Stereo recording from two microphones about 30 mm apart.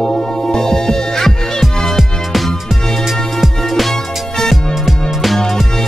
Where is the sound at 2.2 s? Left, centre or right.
Centre.